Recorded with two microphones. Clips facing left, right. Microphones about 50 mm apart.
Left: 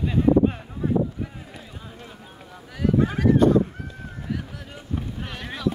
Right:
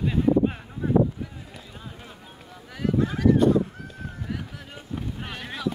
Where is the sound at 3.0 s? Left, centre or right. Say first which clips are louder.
Left 1 dB; left.